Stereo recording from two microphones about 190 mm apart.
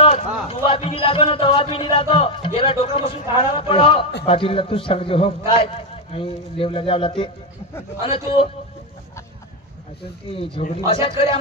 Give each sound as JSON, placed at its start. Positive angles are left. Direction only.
{"t": 0.0, "sound": "a man's voice", "side_deg": 30}
{"t": 10.6, "sound": "a man's voice", "side_deg": 30}